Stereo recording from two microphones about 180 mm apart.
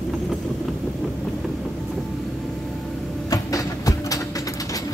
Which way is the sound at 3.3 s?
20° left (ahead or behind).